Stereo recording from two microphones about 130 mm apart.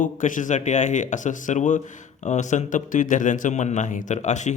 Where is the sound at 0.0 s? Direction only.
80° left.